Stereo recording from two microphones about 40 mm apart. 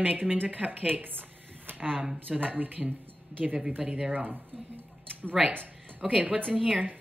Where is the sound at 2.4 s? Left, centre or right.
Right.